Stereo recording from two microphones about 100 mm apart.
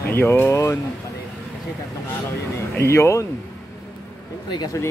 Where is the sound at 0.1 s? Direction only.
20° left (ahead or behind).